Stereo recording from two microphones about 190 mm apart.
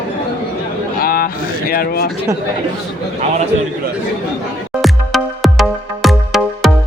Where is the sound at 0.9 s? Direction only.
50° left (ahead or behind).